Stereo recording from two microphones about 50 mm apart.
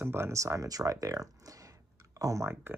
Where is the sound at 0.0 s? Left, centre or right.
Right.